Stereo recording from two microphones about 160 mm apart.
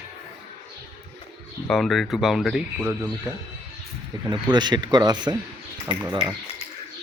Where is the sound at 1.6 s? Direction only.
5° left (ahead or behind).